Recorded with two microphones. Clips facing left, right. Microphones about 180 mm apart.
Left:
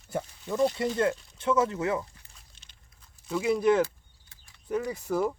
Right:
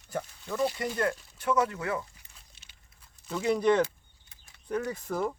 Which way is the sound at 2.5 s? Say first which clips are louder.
Even; 5° right (ahead or behind).